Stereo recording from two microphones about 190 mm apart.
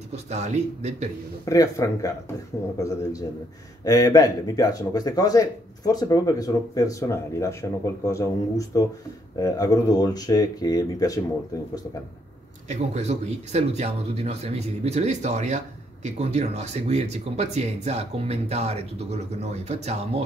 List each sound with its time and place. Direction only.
0.1 s speech: 35° right (ahead or behind)
1.4 s speech: 15° left (ahead or behind)
12.6 s speech: 35° right (ahead or behind)